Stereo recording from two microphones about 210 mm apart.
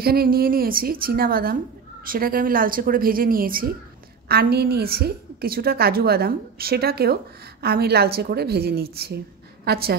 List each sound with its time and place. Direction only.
0.0 s a woman's voice: 45° right (ahead or behind)